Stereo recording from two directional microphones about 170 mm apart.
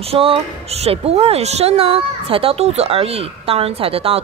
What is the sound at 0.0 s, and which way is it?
A woman's voice, 35° right (ahead or behind).